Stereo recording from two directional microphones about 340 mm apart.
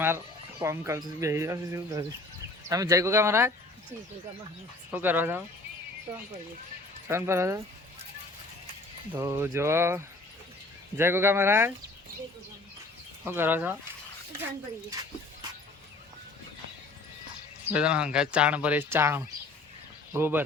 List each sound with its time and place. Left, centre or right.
0.6 s speech: centre
4.9 s speech: centre
7.1 s speech: centre
9.1 s speech: centre
13.2 s speech: centre
14.8 s speech: centre
17.7 s speech: centre